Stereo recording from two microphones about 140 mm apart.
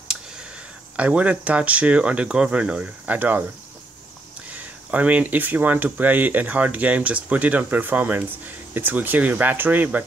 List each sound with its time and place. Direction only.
0.9 s speech: 10° right (ahead or behind)
4.9 s speech: 10° right (ahead or behind)